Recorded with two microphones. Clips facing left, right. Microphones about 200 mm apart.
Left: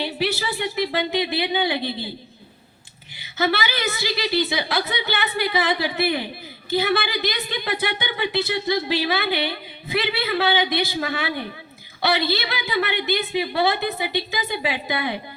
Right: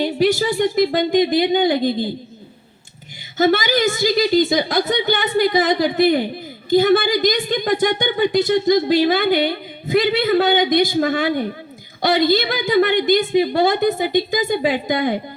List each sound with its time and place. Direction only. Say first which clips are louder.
0.0 s speech: right 8 dB; 45° right (ahead or behind)
3.3 s speech: right 7 dB; 45° right (ahead or behind)